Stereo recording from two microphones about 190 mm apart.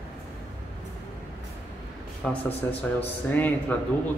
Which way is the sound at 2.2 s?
Centre (ahead or behind).